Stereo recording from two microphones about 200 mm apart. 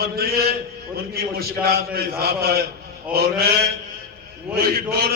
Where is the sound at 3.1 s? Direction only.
5° right (ahead or behind).